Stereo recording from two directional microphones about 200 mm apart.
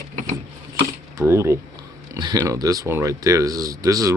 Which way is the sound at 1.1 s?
15° right (ahead or behind).